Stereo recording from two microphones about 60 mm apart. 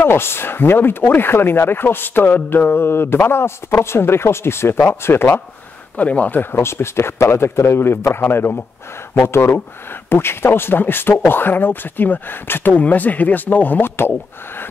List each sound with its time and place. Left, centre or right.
0.0 s speech: left
5.9 s speech: left
6.5 s a man's voice: left